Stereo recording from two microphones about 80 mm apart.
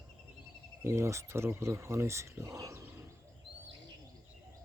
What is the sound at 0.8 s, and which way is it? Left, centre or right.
Speech, right.